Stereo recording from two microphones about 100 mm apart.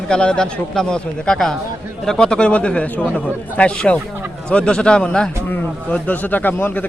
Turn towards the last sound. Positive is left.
turn(degrees=15)  # may be behind; listen again after turning